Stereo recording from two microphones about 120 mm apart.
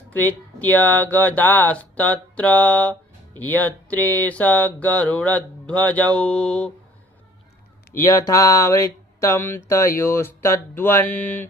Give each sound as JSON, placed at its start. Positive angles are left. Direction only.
{"t": 0.1, "sound": "speech", "side_deg": 15}
{"t": 8.2, "sound": "speech", "side_deg": 25}